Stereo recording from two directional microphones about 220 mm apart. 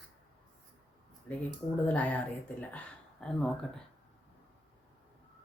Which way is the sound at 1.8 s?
5° left (ahead or behind).